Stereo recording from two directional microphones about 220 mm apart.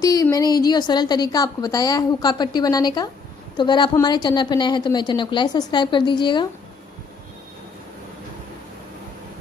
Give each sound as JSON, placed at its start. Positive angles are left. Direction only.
{"t": 0.0, "sound": "a woman's voice", "side_deg": 15}